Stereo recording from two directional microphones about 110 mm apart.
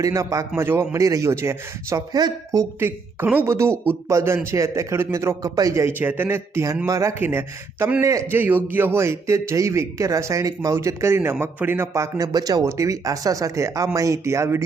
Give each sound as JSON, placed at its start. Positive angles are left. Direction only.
{"t": 0.0, "sound": "a man's voice", "side_deg": -30}
{"t": 2.8, "sound": "a man's voice", "side_deg": -20}
{"t": 7.2, "sound": "a man's voice", "side_deg": -20}
{"t": 8.0, "sound": "a man's voice", "side_deg": -30}
{"t": 8.4, "sound": "a man's voice", "side_deg": -15}